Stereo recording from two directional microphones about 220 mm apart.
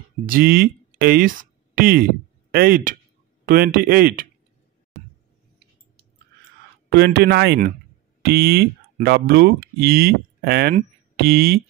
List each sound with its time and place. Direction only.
0.3 s a man's voice: 45° right (ahead or behind)
6.9 s a man's voice: 45° right (ahead or behind)